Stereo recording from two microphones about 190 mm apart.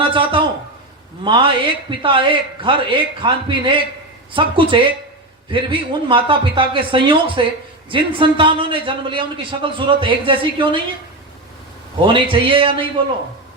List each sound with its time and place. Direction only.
0.0 s a sound: 25° right (ahead or behind)
1.2 s a man's voice: 25° right (ahead or behind)
12.0 s a man's voice: 25° right (ahead or behind)